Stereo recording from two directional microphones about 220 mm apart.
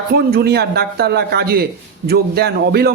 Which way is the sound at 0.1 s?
45° right (ahead or behind).